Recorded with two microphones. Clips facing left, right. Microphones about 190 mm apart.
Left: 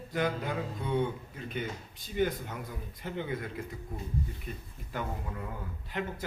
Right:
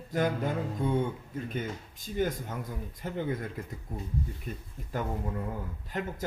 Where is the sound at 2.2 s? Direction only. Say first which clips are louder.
Even; 45° right (ahead or behind).